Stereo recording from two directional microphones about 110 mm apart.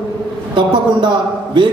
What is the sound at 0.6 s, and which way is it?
Speech, 45° right (ahead or behind).